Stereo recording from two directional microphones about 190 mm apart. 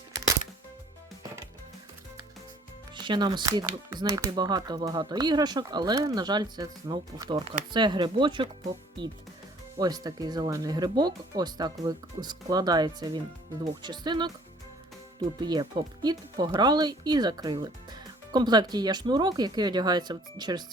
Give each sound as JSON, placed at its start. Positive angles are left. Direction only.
{"t": 2.9, "sound": "speech", "side_deg": -25}
{"t": 9.7, "sound": "speech", "side_deg": -20}
{"t": 15.4, "sound": "speech", "side_deg": -20}